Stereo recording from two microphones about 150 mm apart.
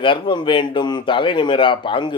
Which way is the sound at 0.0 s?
35° left (ahead or behind).